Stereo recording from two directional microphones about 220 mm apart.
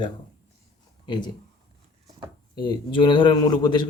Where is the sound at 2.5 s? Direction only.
20° left (ahead or behind).